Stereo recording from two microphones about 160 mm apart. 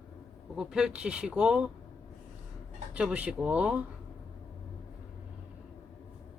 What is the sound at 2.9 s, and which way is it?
Speech, 10° right (ahead or behind).